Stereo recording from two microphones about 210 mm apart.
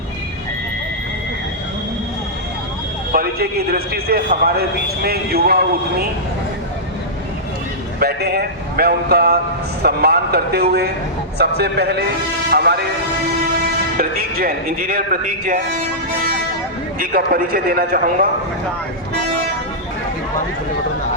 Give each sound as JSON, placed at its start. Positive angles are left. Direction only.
{"t": 3.1, "sound": "speech", "side_deg": -45}
{"t": 7.9, "sound": "speech", "side_deg": -50}
{"t": 12.5, "sound": "vehicle", "side_deg": -50}
{"t": 14.0, "sound": "speech", "side_deg": -45}
{"t": 17.0, "sound": "speech", "side_deg": -40}